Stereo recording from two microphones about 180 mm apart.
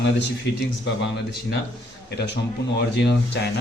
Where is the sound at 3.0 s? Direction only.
70° left (ahead or behind).